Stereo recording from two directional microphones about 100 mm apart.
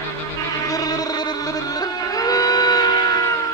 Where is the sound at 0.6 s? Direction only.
40° left (ahead or behind).